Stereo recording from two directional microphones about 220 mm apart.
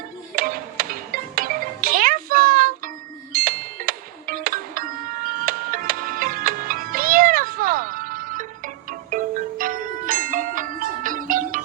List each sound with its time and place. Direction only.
0.3 s music: 40° right (ahead or behind)